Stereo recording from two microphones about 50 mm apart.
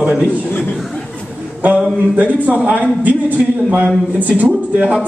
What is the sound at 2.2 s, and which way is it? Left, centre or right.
Speech, right.